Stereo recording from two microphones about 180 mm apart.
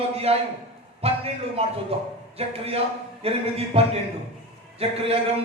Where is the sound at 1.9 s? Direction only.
35° right (ahead or behind).